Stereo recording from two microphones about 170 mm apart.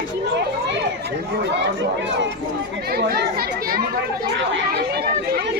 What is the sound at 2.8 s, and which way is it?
Chatter, 65° right (ahead or behind).